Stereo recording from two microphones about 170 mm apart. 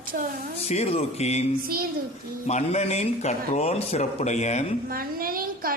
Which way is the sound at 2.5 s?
40° left (ahead or behind).